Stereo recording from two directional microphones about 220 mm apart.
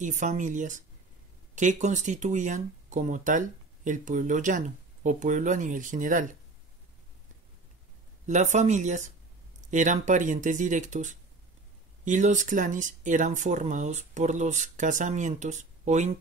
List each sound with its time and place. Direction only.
0.0 s speech: 35° right (ahead or behind)
8.3 s speech: 30° right (ahead or behind)